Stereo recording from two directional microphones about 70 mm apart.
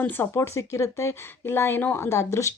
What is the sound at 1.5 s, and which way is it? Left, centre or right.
Speech, left.